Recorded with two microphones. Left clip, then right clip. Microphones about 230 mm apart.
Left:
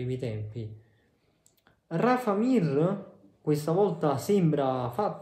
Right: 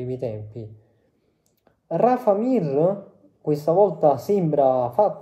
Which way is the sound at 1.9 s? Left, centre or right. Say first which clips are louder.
Right 8 dB; left.